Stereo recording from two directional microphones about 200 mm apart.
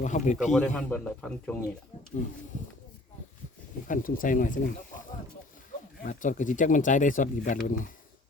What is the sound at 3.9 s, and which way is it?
Speech, 45° left (ahead or behind).